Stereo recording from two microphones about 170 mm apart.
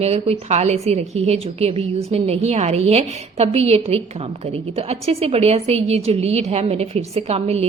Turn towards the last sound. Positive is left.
turn(degrees=-40)  # may be behind; listen again after turning